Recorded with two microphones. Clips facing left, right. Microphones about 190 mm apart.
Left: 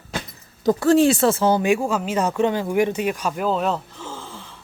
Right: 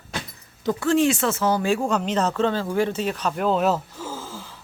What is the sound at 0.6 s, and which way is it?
Speech, 40° left (ahead or behind).